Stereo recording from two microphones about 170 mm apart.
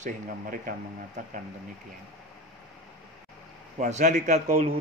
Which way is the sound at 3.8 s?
45° right (ahead or behind).